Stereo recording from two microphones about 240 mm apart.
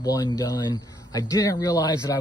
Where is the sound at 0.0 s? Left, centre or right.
Centre.